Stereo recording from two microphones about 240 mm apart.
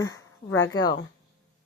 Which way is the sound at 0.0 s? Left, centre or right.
Centre.